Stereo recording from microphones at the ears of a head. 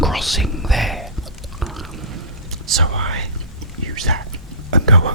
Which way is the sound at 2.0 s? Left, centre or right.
Right.